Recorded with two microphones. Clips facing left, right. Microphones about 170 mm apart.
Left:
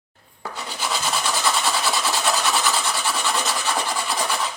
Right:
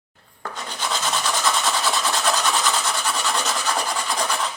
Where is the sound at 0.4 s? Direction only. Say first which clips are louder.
Even; 5° left (ahead or behind).